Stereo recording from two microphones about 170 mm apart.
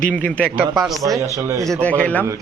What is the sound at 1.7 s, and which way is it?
Speech, 10° left (ahead or behind).